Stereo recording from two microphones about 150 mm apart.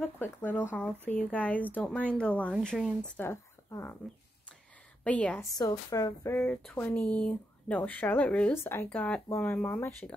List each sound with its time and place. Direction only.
0.0 s speech: 15° left (ahead or behind)
3.2 s speech: 15° left (ahead or behind)
5.0 s speech: 10° left (ahead or behind)
5.4 s speech: 20° left (ahead or behind)
6.4 s speech: 5° left (ahead or behind)